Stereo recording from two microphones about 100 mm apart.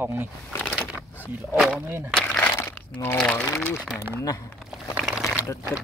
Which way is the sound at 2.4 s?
20° left (ahead or behind).